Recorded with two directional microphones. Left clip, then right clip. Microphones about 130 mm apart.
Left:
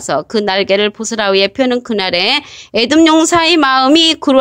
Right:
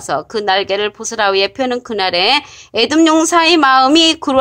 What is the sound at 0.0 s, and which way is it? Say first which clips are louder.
A woman's voice: left 2 dB; 30° left (ahead or behind).